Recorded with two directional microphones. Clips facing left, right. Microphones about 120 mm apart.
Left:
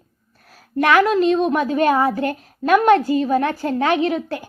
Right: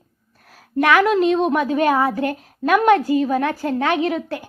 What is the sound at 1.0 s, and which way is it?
A woman's voice, 15° right (ahead or behind).